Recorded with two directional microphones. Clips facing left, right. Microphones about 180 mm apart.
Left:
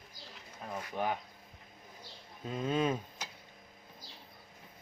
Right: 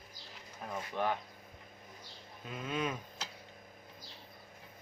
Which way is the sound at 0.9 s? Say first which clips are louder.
Even; 10° left (ahead or behind).